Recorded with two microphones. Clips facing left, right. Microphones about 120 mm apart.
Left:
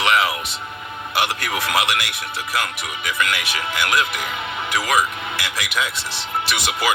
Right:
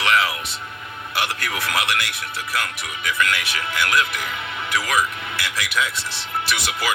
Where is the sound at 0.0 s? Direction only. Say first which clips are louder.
Left 2 dB; 15° left (ahead or behind).